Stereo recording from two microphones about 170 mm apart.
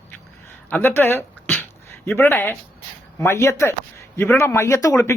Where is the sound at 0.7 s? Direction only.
10° left (ahead or behind).